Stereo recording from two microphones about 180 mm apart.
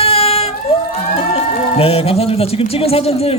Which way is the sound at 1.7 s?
30° left (ahead or behind).